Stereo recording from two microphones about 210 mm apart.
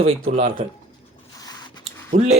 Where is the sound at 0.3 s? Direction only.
30° right (ahead or behind).